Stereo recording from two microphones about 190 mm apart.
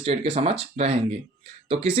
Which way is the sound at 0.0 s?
30° right (ahead or behind).